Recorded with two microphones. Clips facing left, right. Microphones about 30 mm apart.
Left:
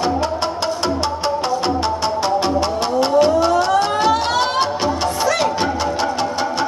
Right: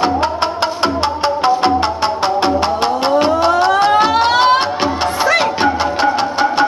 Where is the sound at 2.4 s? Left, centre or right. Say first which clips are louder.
Right 4 dB; right.